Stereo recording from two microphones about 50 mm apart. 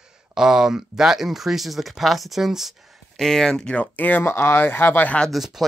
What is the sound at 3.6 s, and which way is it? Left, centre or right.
Speech, left.